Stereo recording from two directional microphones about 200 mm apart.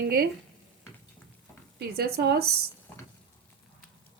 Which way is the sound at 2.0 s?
50° right (ahead or behind).